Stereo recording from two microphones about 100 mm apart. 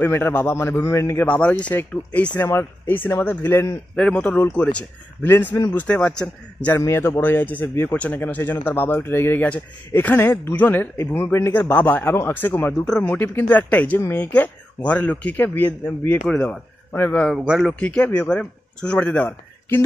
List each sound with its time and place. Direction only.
0.0 s speech: 20° left (ahead or behind)
1.2 s speech: 10° left (ahead or behind)
3.9 s speech: 15° left (ahead or behind)
6.8 s speech: 25° left (ahead or behind)
12.7 s speech: 10° left (ahead or behind)
16.3 s speech: 10° left (ahead or behind)
17.5 s speech: centre (ahead or behind)
17.7 s speech: 10° left (ahead or behind)